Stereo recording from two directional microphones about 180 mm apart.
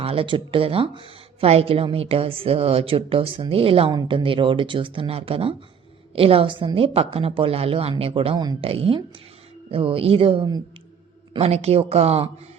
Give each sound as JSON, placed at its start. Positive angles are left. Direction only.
{"t": 0.0, "sound": "speech", "side_deg": -30}